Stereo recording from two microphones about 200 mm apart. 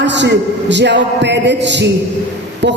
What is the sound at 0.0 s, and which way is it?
A woman's voice, 60° right (ahead or behind).